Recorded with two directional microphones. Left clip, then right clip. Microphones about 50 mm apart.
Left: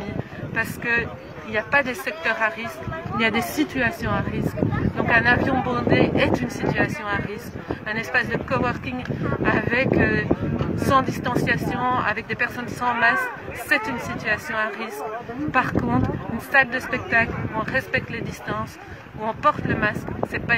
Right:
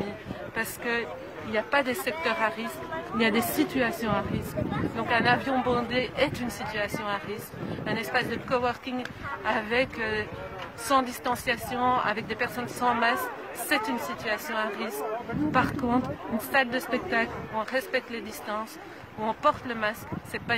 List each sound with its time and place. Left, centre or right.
0.6 s speech: left
19.7 s speech: left